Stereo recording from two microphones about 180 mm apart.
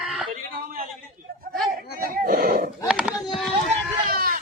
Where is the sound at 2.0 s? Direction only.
55° right (ahead or behind).